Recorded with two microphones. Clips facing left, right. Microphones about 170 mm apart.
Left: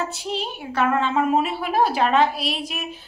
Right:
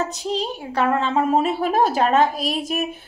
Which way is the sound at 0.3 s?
35° right (ahead or behind).